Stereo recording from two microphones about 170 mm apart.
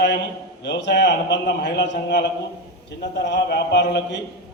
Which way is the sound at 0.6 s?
90° left.